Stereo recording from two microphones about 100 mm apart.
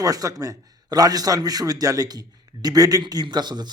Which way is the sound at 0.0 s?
35° right (ahead or behind).